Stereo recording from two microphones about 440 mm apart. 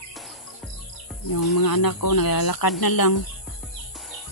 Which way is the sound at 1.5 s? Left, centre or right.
Left.